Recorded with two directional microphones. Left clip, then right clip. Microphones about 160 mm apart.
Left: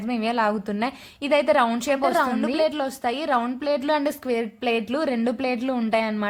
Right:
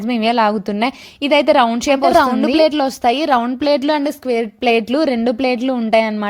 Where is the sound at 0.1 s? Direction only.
45° right (ahead or behind).